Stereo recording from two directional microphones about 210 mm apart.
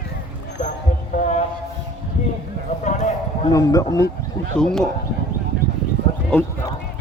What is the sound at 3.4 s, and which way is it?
Speech, 15° left (ahead or behind).